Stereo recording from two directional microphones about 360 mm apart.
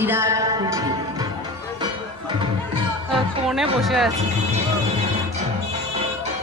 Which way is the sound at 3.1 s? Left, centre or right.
Centre.